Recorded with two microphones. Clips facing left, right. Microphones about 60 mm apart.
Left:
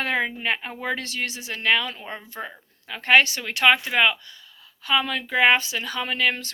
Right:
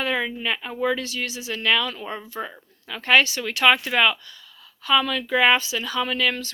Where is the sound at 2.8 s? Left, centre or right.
Left.